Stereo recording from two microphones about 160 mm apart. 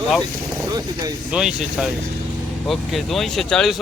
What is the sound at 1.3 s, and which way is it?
A man's voice, 5° right (ahead or behind).